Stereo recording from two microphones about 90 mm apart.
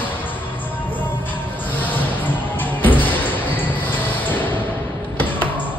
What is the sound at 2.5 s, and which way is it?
Basketball bounce, 20° left (ahead or behind).